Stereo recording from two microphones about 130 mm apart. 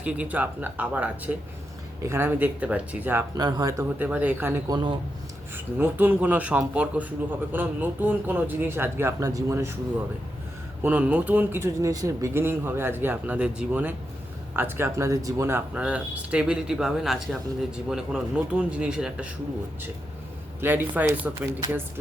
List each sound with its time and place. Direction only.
0.0 s speech: 10° right (ahead or behind)
3.3 s speech: 30° right (ahead or behind)
3.9 s speech: 10° right (ahead or behind)
4.7 s speech: 35° right (ahead or behind)
5.5 s speech: 15° right (ahead or behind)
10.8 s speech: 10° right (ahead or behind)
20.6 s speech: 15° right (ahead or behind)